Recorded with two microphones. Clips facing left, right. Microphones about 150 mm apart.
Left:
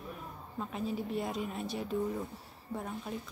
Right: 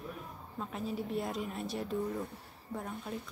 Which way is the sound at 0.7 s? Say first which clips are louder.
Left 1 dB; centre (ahead or behind).